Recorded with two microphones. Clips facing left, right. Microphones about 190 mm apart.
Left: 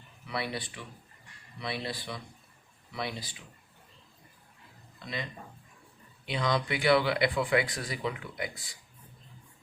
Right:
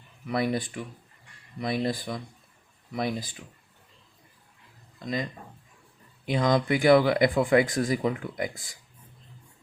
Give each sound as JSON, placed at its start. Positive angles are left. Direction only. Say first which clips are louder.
{"t": 0.3, "sound": "speech", "louder": "right 8 dB", "side_deg": -45}
{"t": 4.9, "sound": "speech", "louder": "right 7 dB", "side_deg": -40}